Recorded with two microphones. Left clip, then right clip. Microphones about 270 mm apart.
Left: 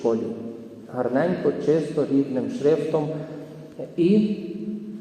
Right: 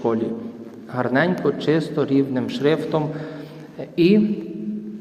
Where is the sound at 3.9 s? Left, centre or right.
Right.